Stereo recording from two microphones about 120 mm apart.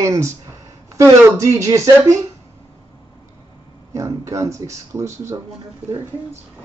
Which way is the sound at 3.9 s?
25° right (ahead or behind).